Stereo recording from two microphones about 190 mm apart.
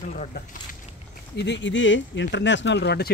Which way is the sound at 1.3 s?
65° left (ahead or behind).